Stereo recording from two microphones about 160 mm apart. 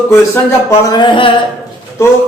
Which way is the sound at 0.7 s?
25° left (ahead or behind).